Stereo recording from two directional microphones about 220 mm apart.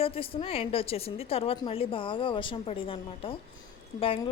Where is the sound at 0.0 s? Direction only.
25° left (ahead or behind).